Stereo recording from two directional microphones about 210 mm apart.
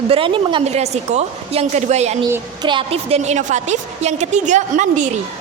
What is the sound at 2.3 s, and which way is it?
A woman's voice, 20° right (ahead or behind).